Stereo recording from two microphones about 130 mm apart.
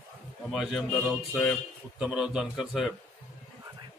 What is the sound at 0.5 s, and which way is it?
Speech, centre (ahead or behind).